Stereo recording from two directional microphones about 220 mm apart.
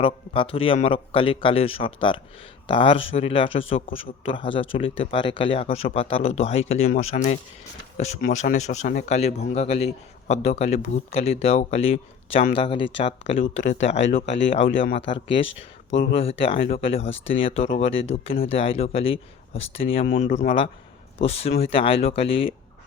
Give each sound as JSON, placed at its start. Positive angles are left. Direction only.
{"t": 0.0, "sound": "a man's voice", "side_deg": 25}
{"t": 7.9, "sound": "a man's voice", "side_deg": 30}
{"t": 17.1, "sound": "speech", "side_deg": 60}
{"t": 17.4, "sound": "a man's voice", "side_deg": 25}